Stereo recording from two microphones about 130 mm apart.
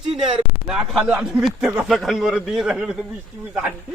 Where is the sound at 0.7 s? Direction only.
5° right (ahead or behind).